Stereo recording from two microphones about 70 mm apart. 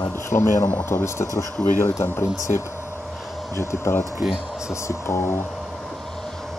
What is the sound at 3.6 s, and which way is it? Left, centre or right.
Speech, left.